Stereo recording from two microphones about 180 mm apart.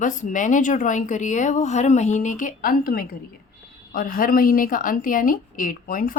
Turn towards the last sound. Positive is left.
turn(degrees=50)  # may be behind; listen again after turning